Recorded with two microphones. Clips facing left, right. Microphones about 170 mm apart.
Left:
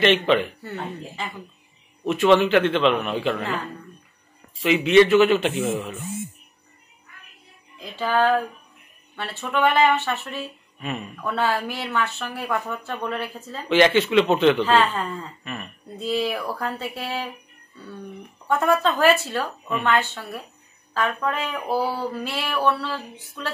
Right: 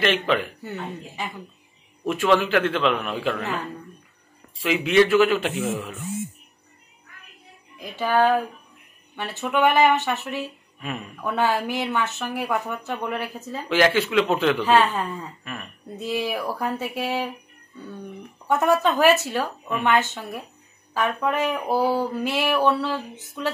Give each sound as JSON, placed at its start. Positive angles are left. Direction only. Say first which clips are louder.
{"t": 0.0, "sound": "a man's voice", "louder": "left 3 dB", "side_deg": -5}
{"t": 0.6, "sound": "speech", "louder": "left 1 dB", "side_deg": -15}
{"t": 2.0, "sound": "a man's voice", "louder": "left 3 dB", "side_deg": -5}
{"t": 4.6, "sound": "a man's voice", "louder": "left 3 dB", "side_deg": -5}
{"t": 7.8, "sound": "a man's voice", "louder": "right 1 dB", "side_deg": -15}
{"t": 14.7, "sound": "speech", "louder": "right 1 dB", "side_deg": -15}
{"t": 18.5, "sound": "speech", "louder": "right 1 dB", "side_deg": -15}